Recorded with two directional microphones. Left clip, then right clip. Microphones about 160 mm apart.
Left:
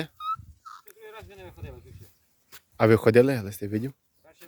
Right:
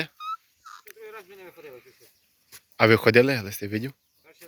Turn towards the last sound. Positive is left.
turn(degrees=20)  # may be behind; listen again after turning